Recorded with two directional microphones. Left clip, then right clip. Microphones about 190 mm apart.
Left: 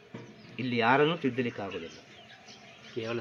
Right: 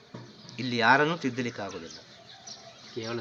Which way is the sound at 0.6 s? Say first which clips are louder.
Right 2 dB; 15° left (ahead or behind).